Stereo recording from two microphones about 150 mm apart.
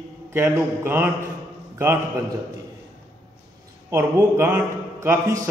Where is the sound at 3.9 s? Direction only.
15° right (ahead or behind).